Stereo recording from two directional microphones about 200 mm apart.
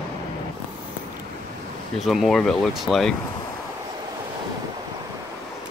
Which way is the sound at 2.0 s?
Centre (ahead or behind).